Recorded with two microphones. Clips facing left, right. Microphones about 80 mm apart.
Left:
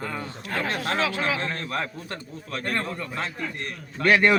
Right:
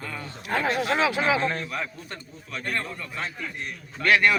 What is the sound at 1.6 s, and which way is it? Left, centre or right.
A man's voice, left.